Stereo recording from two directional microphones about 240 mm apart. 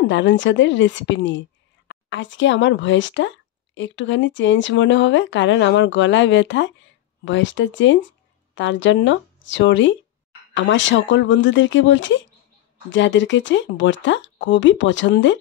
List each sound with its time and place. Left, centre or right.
0.1 s speech: left